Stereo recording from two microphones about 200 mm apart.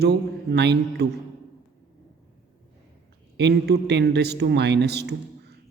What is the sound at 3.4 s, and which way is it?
A man's voice, 55° right (ahead or behind).